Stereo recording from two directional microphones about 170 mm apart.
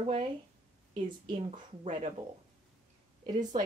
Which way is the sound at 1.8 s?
40° right (ahead or behind).